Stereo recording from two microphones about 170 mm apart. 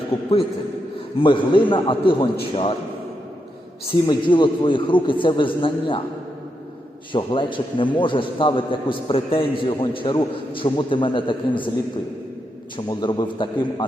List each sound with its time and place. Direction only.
0.1 s a man's voice: 35° left (ahead or behind)
4.0 s a man's voice: 30° left (ahead or behind)
7.1 s a man's voice: 30° left (ahead or behind)
12.7 s a man's voice: 25° left (ahead or behind)